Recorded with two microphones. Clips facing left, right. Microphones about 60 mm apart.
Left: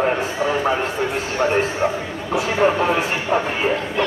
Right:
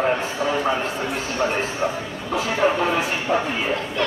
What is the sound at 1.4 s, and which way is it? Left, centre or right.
Speech, left.